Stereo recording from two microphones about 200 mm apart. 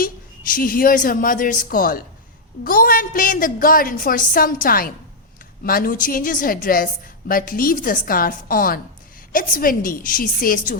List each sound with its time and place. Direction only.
0.5 s a woman's voice: 45° left (ahead or behind)